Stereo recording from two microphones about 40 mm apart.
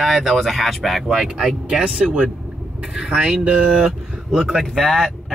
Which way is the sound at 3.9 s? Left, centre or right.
Centre.